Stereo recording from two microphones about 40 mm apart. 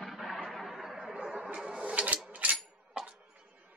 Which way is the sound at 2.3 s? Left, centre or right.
Right.